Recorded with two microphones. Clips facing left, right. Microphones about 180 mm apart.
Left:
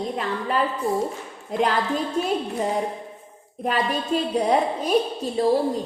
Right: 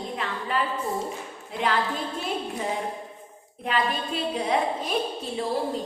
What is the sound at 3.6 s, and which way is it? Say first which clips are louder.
A woman's voice: left 3 dB; 40° left (ahead or behind).